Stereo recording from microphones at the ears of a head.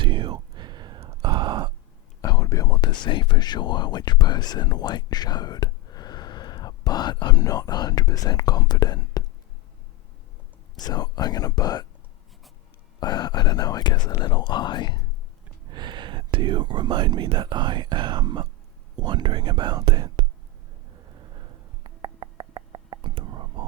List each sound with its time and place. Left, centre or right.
0.0 s sigh: right
2.2 s speech: left
10.8 s speech: left
13.0 s speech: left
15.6 s speech: right
20.9 s a sound: right